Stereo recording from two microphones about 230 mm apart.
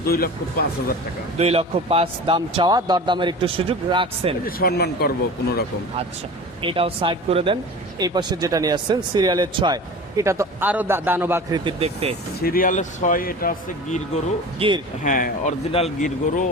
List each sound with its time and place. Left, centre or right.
0.0 s speech: left
1.4 s speech: right
4.4 s speech: left
6.6 s speech: right
12.4 s speech: left
14.6 s speech: right
15.0 s speech: left